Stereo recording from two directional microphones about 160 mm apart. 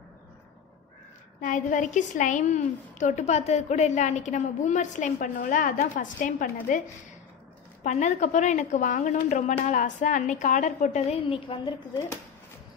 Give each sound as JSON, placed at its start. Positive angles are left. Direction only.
{"t": 1.4, "sound": "a woman's voice", "side_deg": 55}
{"t": 7.8, "sound": "a woman's voice", "side_deg": 50}